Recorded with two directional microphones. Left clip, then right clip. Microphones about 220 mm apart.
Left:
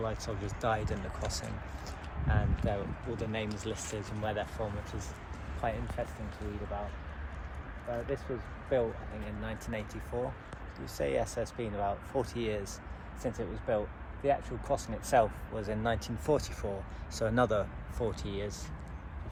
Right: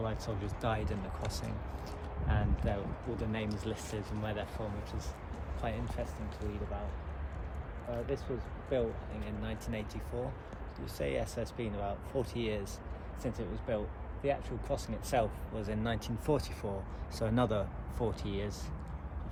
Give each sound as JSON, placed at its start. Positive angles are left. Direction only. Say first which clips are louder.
{"t": 0.0, "sound": "speech", "louder": "left 2 dB", "side_deg": -10}
{"t": 5.6, "sound": "speech", "louder": "left 4 dB", "side_deg": 20}
{"t": 8.7, "sound": "speech", "louder": "left 3 dB", "side_deg": 25}